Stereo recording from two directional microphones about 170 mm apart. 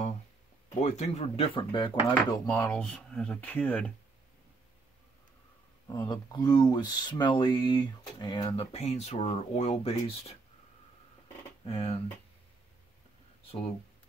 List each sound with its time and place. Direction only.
0.7 s speech: 45° left (ahead or behind)
2.4 s speech: 15° left (ahead or behind)
5.9 s speech: 25° left (ahead or behind)
8.7 s speech: 40° left (ahead or behind)
11.6 s speech: 35° left (ahead or behind)